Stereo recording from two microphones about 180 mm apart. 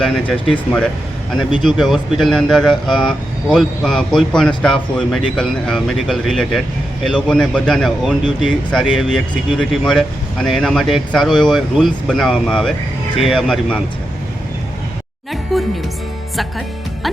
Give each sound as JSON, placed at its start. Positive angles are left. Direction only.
{"t": 1.6, "sound": "speech", "side_deg": 0}
{"t": 8.2, "sound": "speech", "side_deg": 25}
{"t": 8.7, "sound": "speech", "side_deg": 0}
{"t": 15.5, "sound": "speech", "side_deg": 0}